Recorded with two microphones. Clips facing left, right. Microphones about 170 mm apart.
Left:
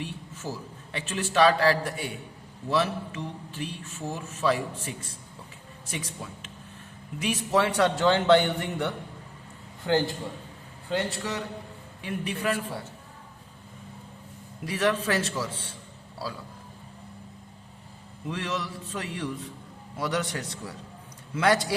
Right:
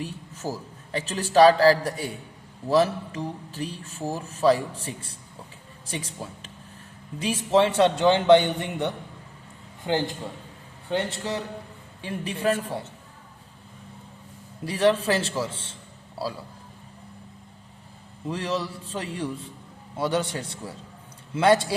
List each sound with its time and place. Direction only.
0.0 s a man's voice: 40° right (ahead or behind); by 11.3 s 20° right (ahead or behind)
12.0 s a man's voice: 30° right (ahead or behind)
14.6 s a man's voice: 30° right (ahead or behind)
18.3 s a man's voice: 30° right (ahead or behind)